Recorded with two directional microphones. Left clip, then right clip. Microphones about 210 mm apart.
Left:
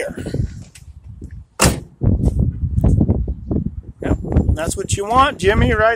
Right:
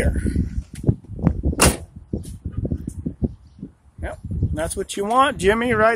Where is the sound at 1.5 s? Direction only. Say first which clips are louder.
Left 2 dB; 35° left (ahead or behind).